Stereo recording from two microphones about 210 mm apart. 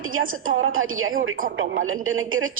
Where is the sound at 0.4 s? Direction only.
75° right (ahead or behind).